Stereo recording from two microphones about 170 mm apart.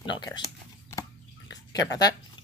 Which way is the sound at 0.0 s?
25° left (ahead or behind).